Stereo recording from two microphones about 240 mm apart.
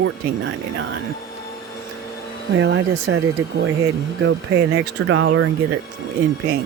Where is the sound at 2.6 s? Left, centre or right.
Right.